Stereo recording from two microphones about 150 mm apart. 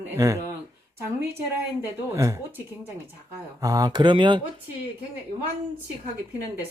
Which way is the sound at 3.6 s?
25° right (ahead or behind).